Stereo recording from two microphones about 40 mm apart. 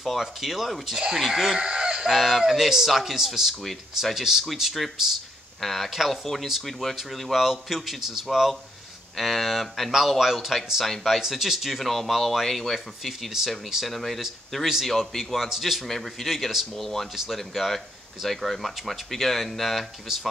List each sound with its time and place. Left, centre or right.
0.0 s speech: centre
1.6 s fowl: right
2.1 s speech: centre